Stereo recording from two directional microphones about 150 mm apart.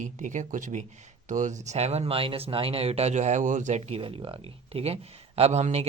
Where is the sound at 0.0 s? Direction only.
55° right (ahead or behind).